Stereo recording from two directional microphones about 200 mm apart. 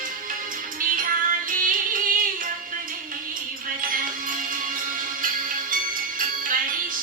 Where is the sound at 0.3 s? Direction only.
45° right (ahead or behind).